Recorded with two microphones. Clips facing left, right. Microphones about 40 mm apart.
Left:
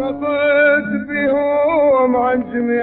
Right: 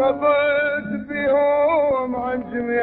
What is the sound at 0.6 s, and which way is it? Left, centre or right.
Music, left.